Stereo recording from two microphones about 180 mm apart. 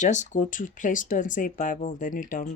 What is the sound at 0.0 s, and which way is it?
Speech, 40° left (ahead or behind).